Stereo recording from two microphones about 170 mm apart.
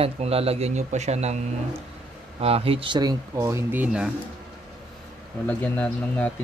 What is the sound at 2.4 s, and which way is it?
Speech, 35° right (ahead or behind).